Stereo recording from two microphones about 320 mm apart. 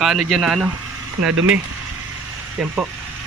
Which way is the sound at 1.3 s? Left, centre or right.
Right.